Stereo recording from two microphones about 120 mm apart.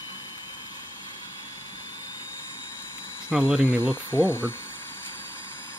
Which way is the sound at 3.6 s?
20° left (ahead or behind).